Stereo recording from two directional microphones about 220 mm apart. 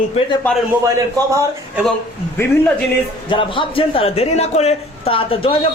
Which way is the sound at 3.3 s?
25° left (ahead or behind).